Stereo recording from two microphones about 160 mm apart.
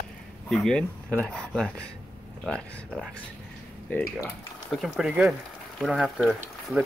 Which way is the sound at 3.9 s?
10° left (ahead or behind).